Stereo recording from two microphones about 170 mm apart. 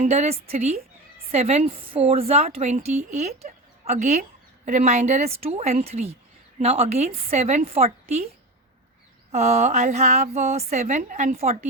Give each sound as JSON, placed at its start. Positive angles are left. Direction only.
{"t": 0.0, "sound": "a woman's voice", "side_deg": -40}
{"t": 9.3, "sound": "a woman's voice", "side_deg": -40}